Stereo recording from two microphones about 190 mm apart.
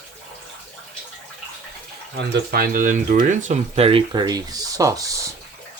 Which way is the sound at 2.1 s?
50° right (ahead or behind).